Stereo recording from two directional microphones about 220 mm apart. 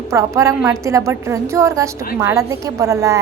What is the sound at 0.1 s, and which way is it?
A woman's voice, 15° right (ahead or behind).